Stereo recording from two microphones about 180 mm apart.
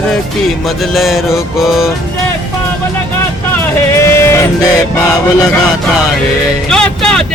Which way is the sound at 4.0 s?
15° left (ahead or behind).